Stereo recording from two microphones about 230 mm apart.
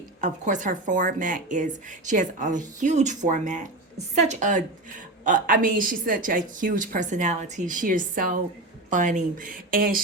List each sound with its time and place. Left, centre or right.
0.2 s speech: right